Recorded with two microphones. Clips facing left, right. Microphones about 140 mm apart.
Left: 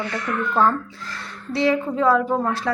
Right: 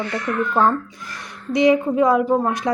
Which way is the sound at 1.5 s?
15° right (ahead or behind).